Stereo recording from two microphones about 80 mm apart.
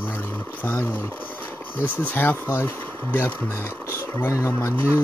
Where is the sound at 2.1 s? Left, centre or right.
Left.